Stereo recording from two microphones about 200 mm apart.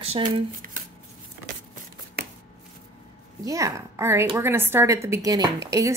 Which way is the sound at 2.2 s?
55° right (ahead or behind).